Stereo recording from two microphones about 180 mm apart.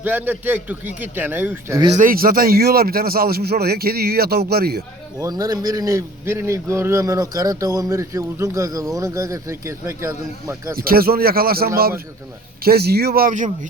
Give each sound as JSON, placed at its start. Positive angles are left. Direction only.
{"t": 0.0, "sound": "a man's voice", "side_deg": -10}
{"t": 2.0, "sound": "a man's voice", "side_deg": -50}
{"t": 5.2, "sound": "a man's voice", "side_deg": -20}
{"t": 10.8, "sound": "a man's voice", "side_deg": -55}